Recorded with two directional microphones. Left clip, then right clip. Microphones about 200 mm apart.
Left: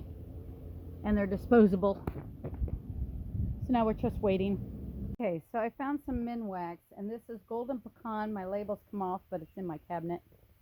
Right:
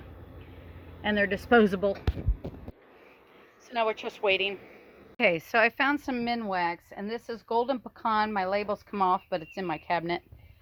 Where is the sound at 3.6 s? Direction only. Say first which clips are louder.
Right 2 dB; 5° right (ahead or behind).